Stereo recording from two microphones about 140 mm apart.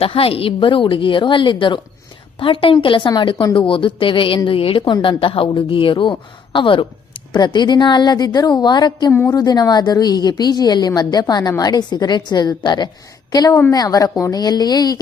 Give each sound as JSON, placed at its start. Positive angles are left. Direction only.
{"t": 0.0, "sound": "a woman's voice", "side_deg": 40}